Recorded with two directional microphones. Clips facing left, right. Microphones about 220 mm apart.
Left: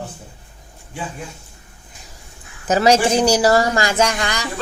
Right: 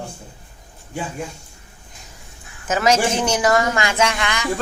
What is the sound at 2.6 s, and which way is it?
Speech, 35° left (ahead or behind).